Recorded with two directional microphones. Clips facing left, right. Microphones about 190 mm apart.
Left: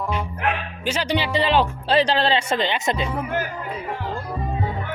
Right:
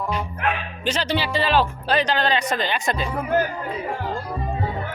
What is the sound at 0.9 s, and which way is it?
Speech, 10° left (ahead or behind).